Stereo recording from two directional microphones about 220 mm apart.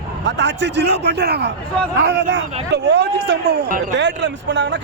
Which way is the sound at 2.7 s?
50° right (ahead or behind).